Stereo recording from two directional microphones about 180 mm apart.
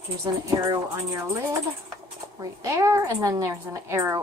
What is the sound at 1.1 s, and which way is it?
A woman's voice, 15° right (ahead or behind).